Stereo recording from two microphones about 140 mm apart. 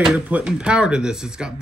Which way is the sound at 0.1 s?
5° right (ahead or behind).